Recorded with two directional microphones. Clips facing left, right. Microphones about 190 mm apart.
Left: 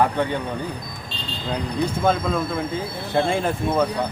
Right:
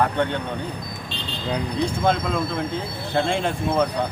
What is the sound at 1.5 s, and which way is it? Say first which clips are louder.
Speech: even; centre (ahead or behind).